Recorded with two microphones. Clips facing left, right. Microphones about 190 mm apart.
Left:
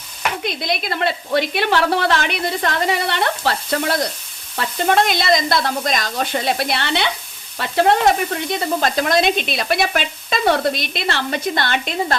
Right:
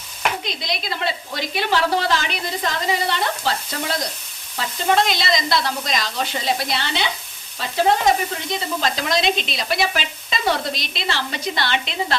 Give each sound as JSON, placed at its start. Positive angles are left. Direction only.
{"t": 0.4, "sound": "sizzle", "side_deg": 55}